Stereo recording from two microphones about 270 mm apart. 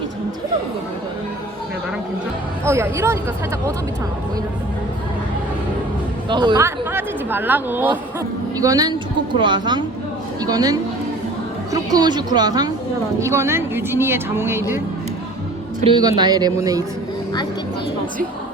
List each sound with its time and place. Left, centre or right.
2.6 s speech: centre
6.2 s speech: centre
15.8 s speech: centre